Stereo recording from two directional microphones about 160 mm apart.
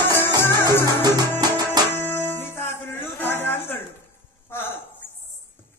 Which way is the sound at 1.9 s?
15° left (ahead or behind).